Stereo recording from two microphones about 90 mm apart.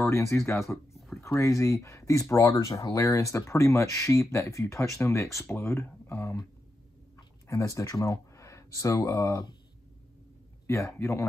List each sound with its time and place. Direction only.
0.0 s speech: 35° left (ahead or behind)
0.7 s a sound: centre (ahead or behind)
1.2 s speech: 35° left (ahead or behind)
7.4 s speech: 35° left (ahead or behind)
11.0 s speech: 30° left (ahead or behind)